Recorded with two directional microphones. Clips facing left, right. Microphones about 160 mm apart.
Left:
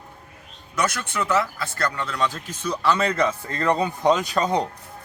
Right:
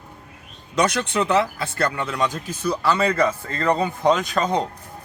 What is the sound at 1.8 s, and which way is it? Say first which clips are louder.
Speech: right 2 dB; 20° right (ahead or behind).